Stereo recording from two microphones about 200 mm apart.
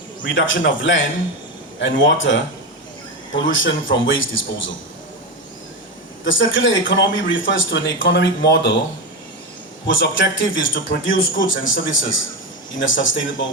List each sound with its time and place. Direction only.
0.2 s a man's voice: 70° left (ahead or behind)
3.4 s a man's voice: 70° left (ahead or behind)
6.2 s a man's voice: 70° left (ahead or behind)
9.8 s a man's voice: 70° left (ahead or behind)